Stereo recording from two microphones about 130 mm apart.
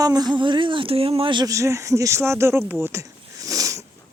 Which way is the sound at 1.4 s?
25° right (ahead or behind).